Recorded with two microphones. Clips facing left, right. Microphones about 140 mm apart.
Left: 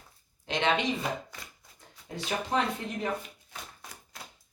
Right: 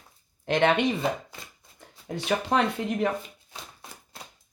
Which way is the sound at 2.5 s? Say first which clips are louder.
Right 4 dB; 75° right (ahead or behind).